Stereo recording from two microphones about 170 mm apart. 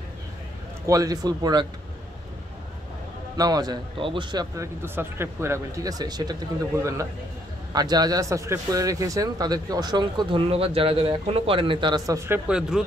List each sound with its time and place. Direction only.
0.8 s speech: 20° right (ahead or behind)
3.3 s speech: 25° right (ahead or behind)
12.4 s speech: 5° right (ahead or behind)